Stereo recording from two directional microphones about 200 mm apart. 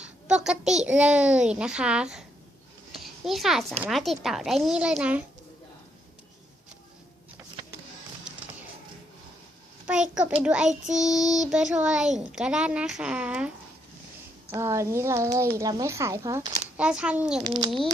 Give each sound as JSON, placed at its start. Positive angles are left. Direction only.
{"t": 0.0, "sound": "a woman's voice", "side_deg": -5}
{"t": 9.8, "sound": "a child's voice", "side_deg": -5}
{"t": 14.5, "sound": "speech", "side_deg": -15}
{"t": 16.7, "sound": "a woman's voice", "side_deg": -5}
{"t": 17.4, "sound": "a sound", "side_deg": -20}